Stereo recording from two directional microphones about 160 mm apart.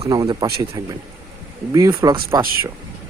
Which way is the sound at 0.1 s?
25° right (ahead or behind).